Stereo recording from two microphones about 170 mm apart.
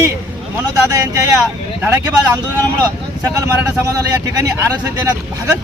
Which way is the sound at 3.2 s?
15° right (ahead or behind).